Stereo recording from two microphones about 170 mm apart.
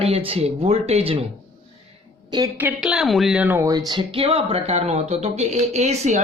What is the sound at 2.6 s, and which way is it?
Speech, 5° right (ahead or behind).